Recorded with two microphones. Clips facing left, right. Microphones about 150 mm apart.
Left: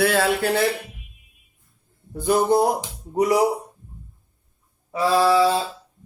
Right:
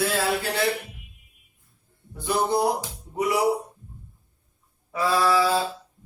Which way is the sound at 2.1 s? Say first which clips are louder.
Left 6 dB; 45° left (ahead or behind).